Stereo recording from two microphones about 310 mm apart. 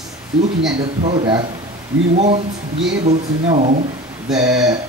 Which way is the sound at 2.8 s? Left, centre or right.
Right.